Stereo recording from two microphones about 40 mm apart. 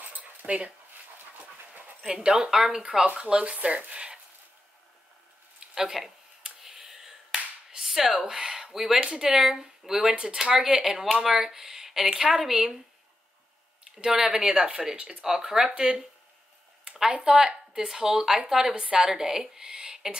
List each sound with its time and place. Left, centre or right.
0.0 s dog: right
2.0 s speech: centre
5.8 s a sound: centre
9.0 s speech: centre
14.0 s speech: centre
17.1 s speech: centre